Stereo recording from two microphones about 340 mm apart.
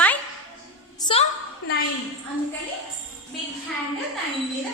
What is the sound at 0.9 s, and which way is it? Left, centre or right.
Speech, centre.